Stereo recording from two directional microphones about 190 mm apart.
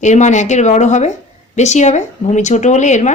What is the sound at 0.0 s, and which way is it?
Speech, 40° left (ahead or behind).